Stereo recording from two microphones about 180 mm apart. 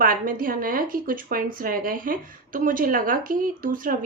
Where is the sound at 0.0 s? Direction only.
50° right (ahead or behind).